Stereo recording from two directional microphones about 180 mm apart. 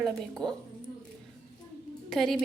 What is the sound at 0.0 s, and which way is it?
Speech, 5° left (ahead or behind).